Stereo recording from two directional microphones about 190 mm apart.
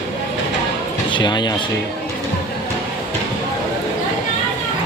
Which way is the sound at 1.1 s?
20° left (ahead or behind).